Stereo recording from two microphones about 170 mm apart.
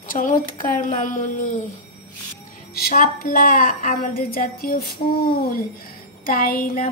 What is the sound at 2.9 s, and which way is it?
A woman's voice, 50° left (ahead or behind).